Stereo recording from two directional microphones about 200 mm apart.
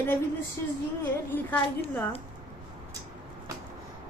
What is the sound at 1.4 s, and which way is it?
Speech, 10° left (ahead or behind).